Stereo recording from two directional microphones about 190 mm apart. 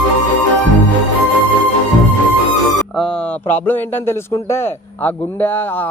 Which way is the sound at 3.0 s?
5° left (ahead or behind).